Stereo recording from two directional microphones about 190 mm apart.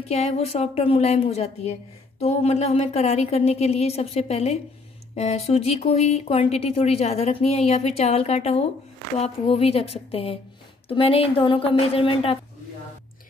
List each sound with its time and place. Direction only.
0.1 s a woman's voice: 35° left (ahead or behind)